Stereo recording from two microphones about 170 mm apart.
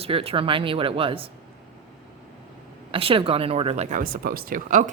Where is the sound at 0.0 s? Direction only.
35° right (ahead or behind).